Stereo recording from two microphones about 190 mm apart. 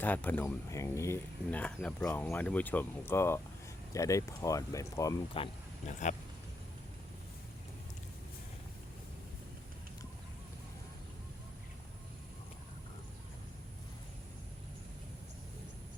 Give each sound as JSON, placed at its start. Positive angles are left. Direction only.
{"t": 0.0, "sound": "speech", "side_deg": 10}
{"t": 5.8, "sound": "speech", "side_deg": 40}